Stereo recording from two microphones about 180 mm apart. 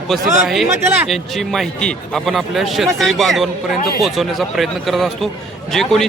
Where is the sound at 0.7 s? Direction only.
15° right (ahead or behind).